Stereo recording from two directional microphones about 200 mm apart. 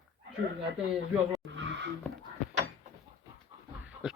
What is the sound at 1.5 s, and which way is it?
Vehicle, 65° right (ahead or behind).